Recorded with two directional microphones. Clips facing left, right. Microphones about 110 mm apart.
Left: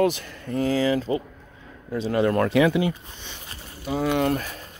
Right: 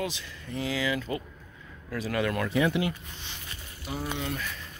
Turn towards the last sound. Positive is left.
turn(degrees=40)  # may be behind; listen again after turning